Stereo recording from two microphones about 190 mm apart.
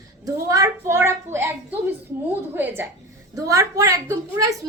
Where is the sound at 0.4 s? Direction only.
15° right (ahead or behind).